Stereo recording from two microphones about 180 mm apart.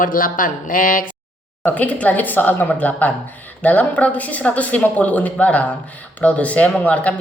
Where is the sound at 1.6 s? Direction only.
10° left (ahead or behind).